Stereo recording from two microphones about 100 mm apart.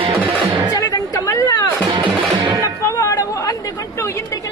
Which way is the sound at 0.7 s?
35° left (ahead or behind).